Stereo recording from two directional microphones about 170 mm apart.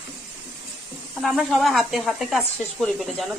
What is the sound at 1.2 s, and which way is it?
A woman's voice, centre (ahead or behind).